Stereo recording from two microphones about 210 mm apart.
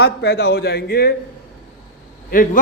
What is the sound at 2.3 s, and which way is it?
Speech, 40° left (ahead or behind).